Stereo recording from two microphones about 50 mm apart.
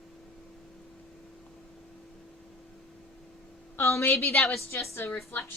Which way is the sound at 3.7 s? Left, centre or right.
Left.